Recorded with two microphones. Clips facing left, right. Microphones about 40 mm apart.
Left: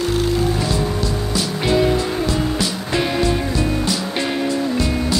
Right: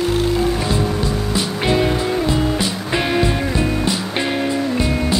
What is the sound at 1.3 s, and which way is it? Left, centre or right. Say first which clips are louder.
Music: even; right.